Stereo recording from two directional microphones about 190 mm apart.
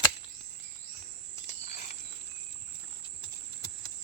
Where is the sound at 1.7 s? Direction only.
40° left (ahead or behind).